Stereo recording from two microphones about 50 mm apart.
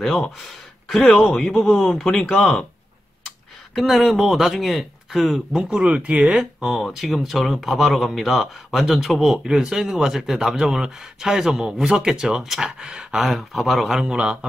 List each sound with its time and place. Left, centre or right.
0.0 s speech: centre
3.7 s speech: centre
5.6 s speech: centre
6.2 s speech: centre
13.2 s speech: centre
14.0 s speech: centre